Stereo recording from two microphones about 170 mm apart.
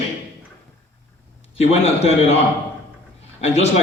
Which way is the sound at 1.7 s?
40° left (ahead or behind).